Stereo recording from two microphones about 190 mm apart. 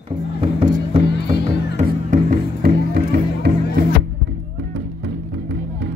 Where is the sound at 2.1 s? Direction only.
50° right (ahead or behind).